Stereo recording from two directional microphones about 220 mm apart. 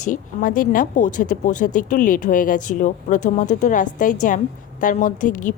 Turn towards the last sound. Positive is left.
turn(degrees=35)  # may be behind; listen again after turning